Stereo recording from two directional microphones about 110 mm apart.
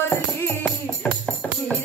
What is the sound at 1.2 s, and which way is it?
Music, 10° left (ahead or behind).